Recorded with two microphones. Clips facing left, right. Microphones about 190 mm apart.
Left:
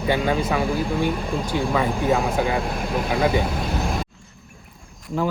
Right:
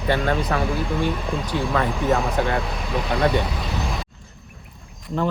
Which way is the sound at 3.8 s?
Centre (ahead or behind).